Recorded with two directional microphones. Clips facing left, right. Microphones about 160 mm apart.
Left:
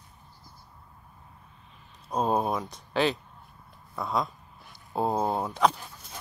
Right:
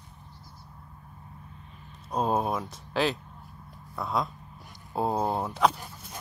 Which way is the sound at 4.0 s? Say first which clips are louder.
Even; centre (ahead or behind).